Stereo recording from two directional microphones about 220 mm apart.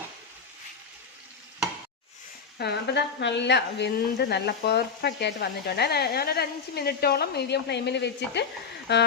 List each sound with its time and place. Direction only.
2.6 s a woman's voice: 50° left (ahead or behind)